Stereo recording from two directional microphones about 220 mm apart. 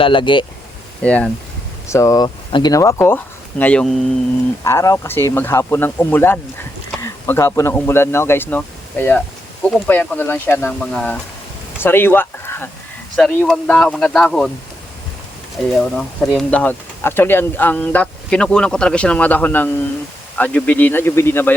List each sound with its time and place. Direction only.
0.0 s speech: 20° left (ahead or behind)
1.0 s speech: 5° left (ahead or behind)
11.8 s a sound: 10° left (ahead or behind)
13.1 s speech: 5° left (ahead or behind)
15.7 s speech: 5° left (ahead or behind)